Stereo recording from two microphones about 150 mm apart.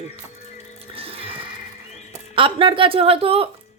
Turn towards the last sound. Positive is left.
turn(degrees=-40)  # may be behind; listen again after turning